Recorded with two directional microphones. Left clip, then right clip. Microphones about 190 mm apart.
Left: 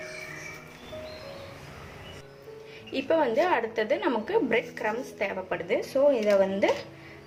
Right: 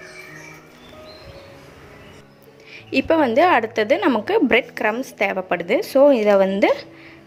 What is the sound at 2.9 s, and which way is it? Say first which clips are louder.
A woman's voice: right 8 dB; 45° right (ahead or behind).